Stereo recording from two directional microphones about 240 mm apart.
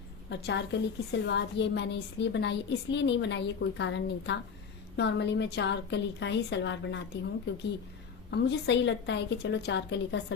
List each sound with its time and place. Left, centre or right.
0.3 s a woman's voice: left
8.3 s a woman's voice: left